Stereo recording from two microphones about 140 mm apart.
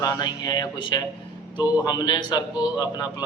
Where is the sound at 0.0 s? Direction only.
25° left (ahead or behind).